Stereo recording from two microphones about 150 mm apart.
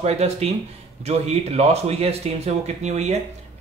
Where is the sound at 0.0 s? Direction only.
45° right (ahead or behind).